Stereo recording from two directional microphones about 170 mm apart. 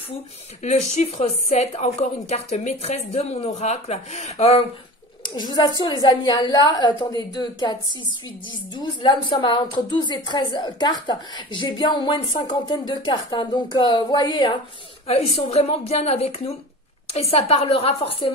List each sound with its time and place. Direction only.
0.6 s a woman's voice: 40° left (ahead or behind); by 7.7 s 25° left (ahead or behind)
8.7 s a woman's voice: 25° left (ahead or behind)